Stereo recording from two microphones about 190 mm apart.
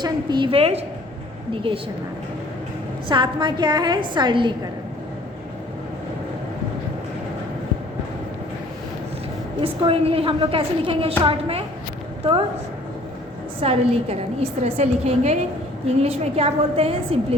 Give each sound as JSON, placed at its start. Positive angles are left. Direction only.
{"t": 0.0, "sound": "a woman's voice", "side_deg": -25}
{"t": 3.1, "sound": "a woman's voice", "side_deg": -25}
{"t": 9.8, "sound": "a woman's voice", "side_deg": -30}
{"t": 13.6, "sound": "a woman's voice", "side_deg": -30}